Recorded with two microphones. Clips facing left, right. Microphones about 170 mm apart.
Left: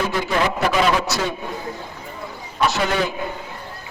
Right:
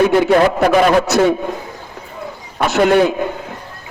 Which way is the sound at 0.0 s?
60° right (ahead or behind).